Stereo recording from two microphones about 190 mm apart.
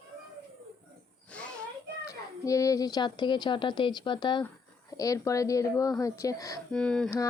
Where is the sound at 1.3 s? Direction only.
5° left (ahead or behind).